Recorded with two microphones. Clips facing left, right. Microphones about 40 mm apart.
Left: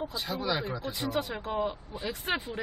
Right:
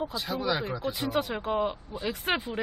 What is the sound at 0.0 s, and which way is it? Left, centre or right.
Speech, centre.